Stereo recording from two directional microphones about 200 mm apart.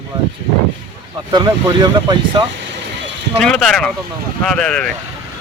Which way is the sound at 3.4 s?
5° left (ahead or behind).